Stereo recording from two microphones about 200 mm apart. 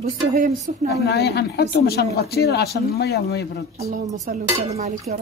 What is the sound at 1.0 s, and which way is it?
Speech, 55° left (ahead or behind).